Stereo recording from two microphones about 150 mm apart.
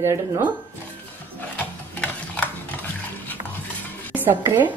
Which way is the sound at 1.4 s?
10° left (ahead or behind).